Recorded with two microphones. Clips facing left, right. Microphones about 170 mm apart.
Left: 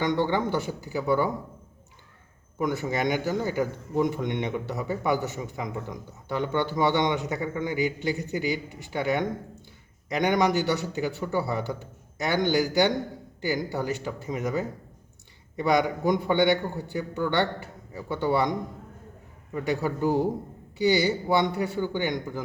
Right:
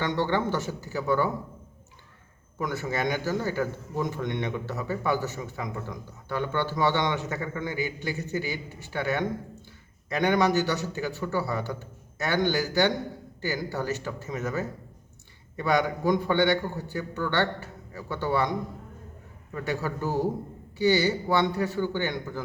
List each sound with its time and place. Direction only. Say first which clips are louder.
0.0 s a man's voice: left 2 dB; 15° left (ahead or behind)
2.6 s a man's voice: left 3 dB; 20° left (ahead or behind)
19.5 s a man's voice: left 3 dB; 15° left (ahead or behind)